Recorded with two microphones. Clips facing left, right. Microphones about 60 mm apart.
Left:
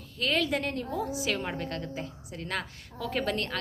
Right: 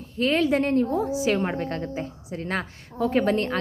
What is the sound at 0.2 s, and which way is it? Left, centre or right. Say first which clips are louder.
A woman's voice: right 7 dB; right.